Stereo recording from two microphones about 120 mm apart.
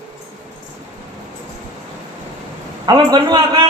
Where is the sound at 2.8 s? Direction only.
35° right (ahead or behind).